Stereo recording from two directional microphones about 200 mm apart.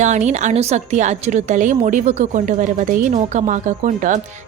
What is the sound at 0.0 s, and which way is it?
A woman's voice, 35° right (ahead or behind).